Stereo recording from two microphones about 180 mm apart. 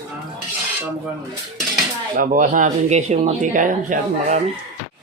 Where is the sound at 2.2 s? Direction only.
45° right (ahead or behind).